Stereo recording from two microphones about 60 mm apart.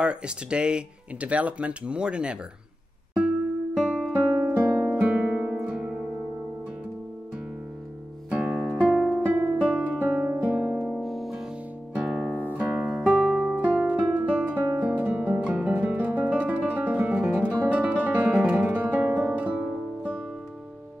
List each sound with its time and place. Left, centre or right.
0.0 s speech: centre
3.2 s music: centre
8.3 s music: right
10.3 s music: right
10.9 s music: centre
11.9 s music: centre
12.3 s music: right
12.9 s music: centre